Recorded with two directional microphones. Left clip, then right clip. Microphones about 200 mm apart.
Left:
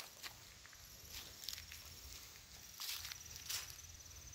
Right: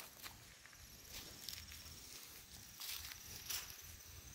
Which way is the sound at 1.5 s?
10° right (ahead or behind).